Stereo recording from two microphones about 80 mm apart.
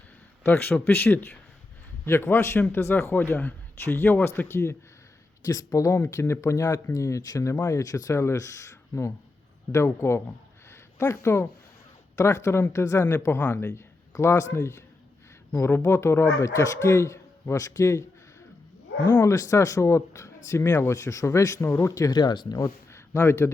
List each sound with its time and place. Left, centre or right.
0.4 s a man's voice: left
5.4 s speech: left
10.7 s a sound: left
12.1 s speech: left
13.1 s a man's voice: left
13.7 s a man's voice: left
15.5 s a man's voice: left
15.8 s speech: left
19.0 s a man's voice: left
19.3 s speech: left
21.9 s speech: left
22.5 s speech: left